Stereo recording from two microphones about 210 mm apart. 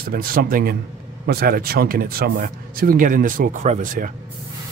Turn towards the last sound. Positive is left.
turn(degrees=-40)  # may be behind; listen again after turning